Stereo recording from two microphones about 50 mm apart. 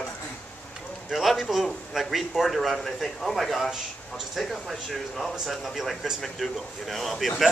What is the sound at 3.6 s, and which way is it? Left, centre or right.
Speech, centre.